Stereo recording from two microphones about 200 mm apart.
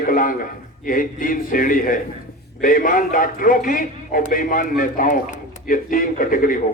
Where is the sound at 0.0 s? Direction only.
45° left (ahead or behind).